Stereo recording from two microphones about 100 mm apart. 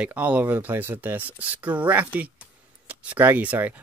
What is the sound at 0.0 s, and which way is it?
Speech, 15° right (ahead or behind).